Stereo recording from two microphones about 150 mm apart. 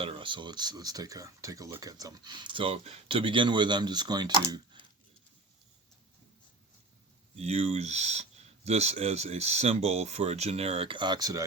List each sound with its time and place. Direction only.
0.0 s speech: 35° right (ahead or behind)
7.3 s speech: 45° right (ahead or behind); by 11.4 s 25° right (ahead or behind)